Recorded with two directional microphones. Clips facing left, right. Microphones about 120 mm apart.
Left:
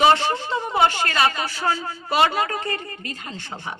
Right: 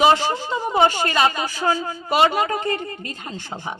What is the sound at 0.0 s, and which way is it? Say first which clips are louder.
Speech: right 1 dB; 10° right (ahead or behind).